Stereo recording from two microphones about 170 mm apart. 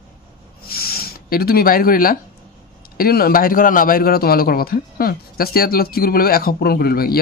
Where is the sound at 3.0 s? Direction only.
60° left (ahead or behind).